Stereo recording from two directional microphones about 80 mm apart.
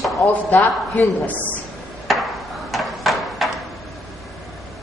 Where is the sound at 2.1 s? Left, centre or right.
Centre.